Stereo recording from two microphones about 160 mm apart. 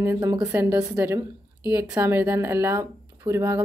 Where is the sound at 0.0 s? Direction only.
15° right (ahead or behind).